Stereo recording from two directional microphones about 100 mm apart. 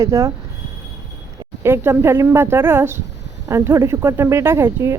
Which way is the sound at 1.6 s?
25° right (ahead or behind).